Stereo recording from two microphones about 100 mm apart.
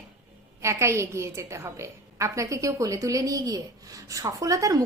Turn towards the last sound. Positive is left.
turn(degrees=-35)  # may be behind; listen again after turning